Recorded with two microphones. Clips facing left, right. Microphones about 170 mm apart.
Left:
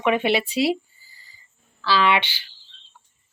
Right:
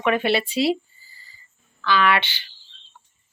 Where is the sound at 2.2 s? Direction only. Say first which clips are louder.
Left 1 dB; 10° left (ahead or behind).